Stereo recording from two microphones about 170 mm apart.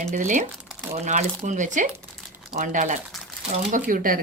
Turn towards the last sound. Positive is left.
turn(degrees=-55)  # may be behind; listen again after turning